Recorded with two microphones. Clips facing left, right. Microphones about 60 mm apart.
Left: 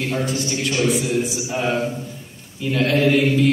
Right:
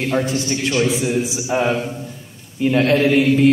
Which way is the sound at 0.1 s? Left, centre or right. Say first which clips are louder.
Right 3 dB; right.